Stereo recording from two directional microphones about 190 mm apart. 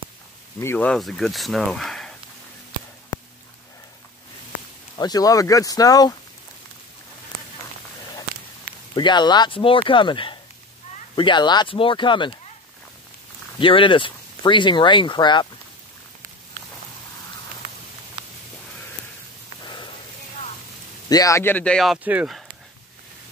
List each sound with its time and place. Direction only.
0.6 s speech: 10° left (ahead or behind)
3.1 s a sound: 20° left (ahead or behind)
4.9 s speech: 20° left (ahead or behind)
8.9 s speech: 20° left (ahead or behind)
13.6 s speech: 25° left (ahead or behind)
19.6 s a sound: 25° left (ahead or behind)
21.1 s speech: 20° left (ahead or behind); by 22.4 s 5° right (ahead or behind)